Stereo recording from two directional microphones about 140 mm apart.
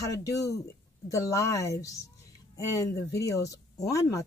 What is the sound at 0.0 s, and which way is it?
Speech, 25° left (ahead or behind).